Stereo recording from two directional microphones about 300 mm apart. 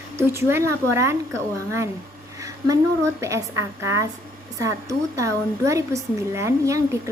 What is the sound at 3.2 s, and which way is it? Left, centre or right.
A woman's voice, centre.